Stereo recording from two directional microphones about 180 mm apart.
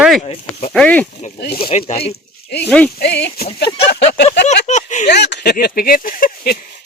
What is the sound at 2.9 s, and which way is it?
Speech, 65° left (ahead or behind).